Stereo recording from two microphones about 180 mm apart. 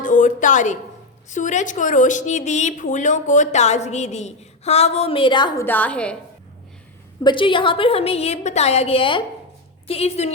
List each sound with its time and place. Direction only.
0.0 s a sound: 45° left (ahead or behind)
1.3 s a woman's voice: 45° left (ahead or behind); by 5.6 s 25° left (ahead or behind)
5.6 s a woman's voice: 10° left (ahead or behind)
7.3 s a woman's voice: 30° left (ahead or behind)